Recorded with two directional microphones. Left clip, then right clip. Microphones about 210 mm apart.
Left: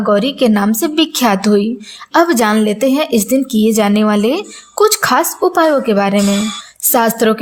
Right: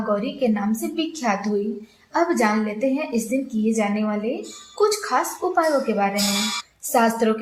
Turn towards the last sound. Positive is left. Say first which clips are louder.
# left 7 dB
turn(degrees=55)  # may be behind; listen again after turning